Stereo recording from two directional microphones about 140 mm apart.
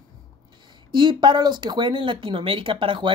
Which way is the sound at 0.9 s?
35° right (ahead or behind).